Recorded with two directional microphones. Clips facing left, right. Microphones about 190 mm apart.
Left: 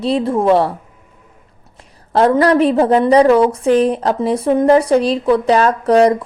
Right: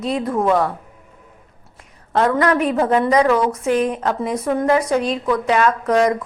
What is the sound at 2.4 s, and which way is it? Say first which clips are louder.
A woman's voice: left 5 dB; 35° left (ahead or behind).